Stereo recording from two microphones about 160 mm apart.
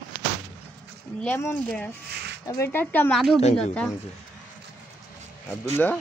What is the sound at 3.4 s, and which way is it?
Speech, 40° left (ahead or behind).